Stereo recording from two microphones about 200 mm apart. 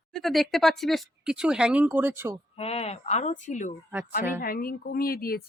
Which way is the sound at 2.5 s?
30° left (ahead or behind).